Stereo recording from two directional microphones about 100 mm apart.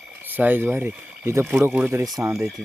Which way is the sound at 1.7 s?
15° right (ahead or behind).